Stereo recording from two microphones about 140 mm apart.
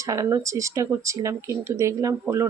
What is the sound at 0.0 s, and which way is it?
Speech, 25° right (ahead or behind).